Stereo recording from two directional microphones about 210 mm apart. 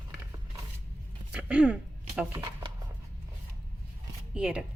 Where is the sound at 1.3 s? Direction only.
5° right (ahead or behind).